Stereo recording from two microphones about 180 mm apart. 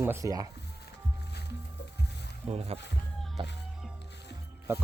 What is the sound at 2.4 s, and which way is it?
Speech, 35° right (ahead or behind).